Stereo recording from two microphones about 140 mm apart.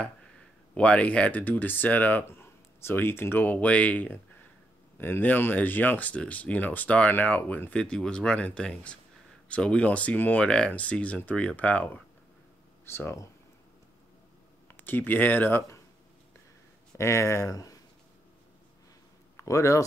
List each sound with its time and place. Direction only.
0.7 s speech: 10° left (ahead or behind)
14.8 s speech: 15° left (ahead or behind)
16.9 s speech: 20° left (ahead or behind)
19.4 s speech: 20° left (ahead or behind)